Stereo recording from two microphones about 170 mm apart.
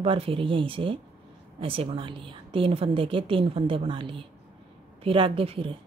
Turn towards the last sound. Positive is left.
turn(degrees=-30)  # may be behind; listen again after turning